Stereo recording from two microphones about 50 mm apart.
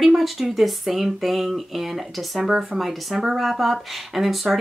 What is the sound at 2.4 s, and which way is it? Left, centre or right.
Speech, centre.